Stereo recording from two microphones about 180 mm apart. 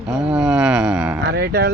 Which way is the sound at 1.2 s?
65° right (ahead or behind).